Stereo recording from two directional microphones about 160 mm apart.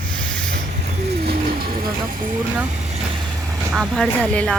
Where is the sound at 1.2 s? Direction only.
75° right (ahead or behind).